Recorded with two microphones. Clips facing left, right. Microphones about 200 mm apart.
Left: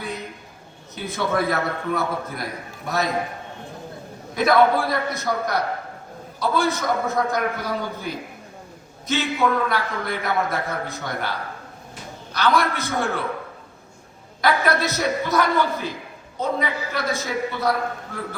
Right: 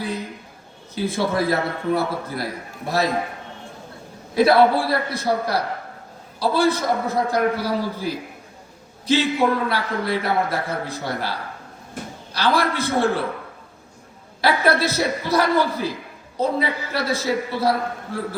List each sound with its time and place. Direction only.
0.9 s a man's voice: 30° right (ahead or behind)
4.4 s a man's voice: 30° right (ahead or behind)
12.3 s a man's voice: 30° right (ahead or behind)
14.4 s a man's voice: 30° right (ahead or behind)